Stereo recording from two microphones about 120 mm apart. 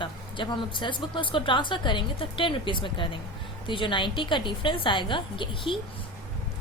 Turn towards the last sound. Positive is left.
turn(degrees=45)  # may be behind; listen again after turning